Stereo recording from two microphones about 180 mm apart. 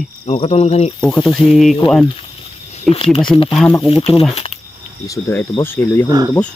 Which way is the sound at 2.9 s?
30° left (ahead or behind).